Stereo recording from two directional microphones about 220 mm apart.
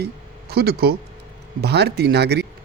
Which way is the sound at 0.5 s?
45° right (ahead or behind).